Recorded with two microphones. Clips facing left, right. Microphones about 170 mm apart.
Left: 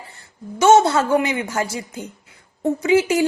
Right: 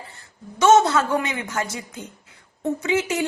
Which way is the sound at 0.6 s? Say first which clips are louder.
Left 2 dB; 30° left (ahead or behind).